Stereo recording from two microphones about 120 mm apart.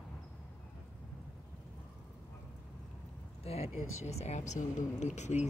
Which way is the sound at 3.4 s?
60° left (ahead or behind).